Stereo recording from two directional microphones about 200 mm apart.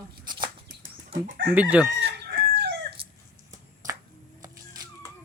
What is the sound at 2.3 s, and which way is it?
Chicken, 50° right (ahead or behind).